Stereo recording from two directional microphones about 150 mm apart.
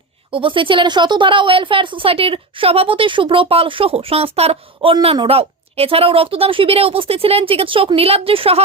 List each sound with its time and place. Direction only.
0.3 s a woman's voice: 35° right (ahead or behind)